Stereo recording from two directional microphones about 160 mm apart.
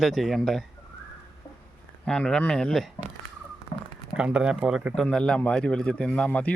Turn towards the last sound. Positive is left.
turn(degrees=10)  # may be behind; listen again after turning